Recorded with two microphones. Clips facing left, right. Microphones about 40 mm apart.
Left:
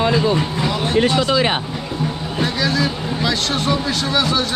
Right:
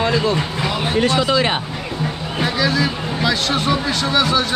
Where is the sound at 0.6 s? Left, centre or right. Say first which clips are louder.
Left 1 dB; centre.